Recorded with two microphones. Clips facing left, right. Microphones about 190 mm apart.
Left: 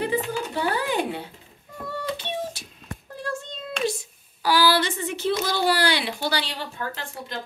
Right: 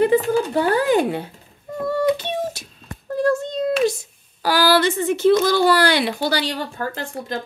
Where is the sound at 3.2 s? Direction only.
45° right (ahead or behind).